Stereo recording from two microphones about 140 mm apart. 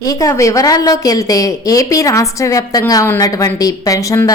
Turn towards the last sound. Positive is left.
turn(degrees=25)  # may be behind; listen again after turning